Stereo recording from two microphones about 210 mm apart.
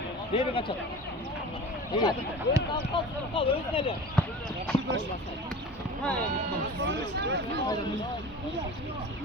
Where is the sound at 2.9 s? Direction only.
25° left (ahead or behind).